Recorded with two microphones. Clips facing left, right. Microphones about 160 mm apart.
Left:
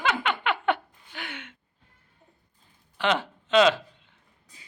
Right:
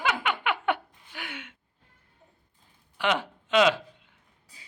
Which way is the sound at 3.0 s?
10° right (ahead or behind).